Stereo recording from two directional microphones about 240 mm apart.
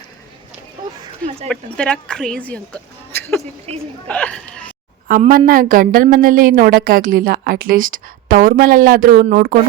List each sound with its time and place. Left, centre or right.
1.5 s speech: centre
4.1 s speech: centre
5.0 s a woman's voice: right